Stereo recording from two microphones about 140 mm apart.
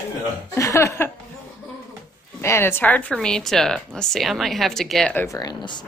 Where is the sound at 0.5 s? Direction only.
20° left (ahead or behind).